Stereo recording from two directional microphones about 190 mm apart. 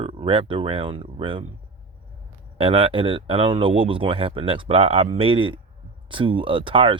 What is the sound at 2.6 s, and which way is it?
Speech, 30° right (ahead or behind).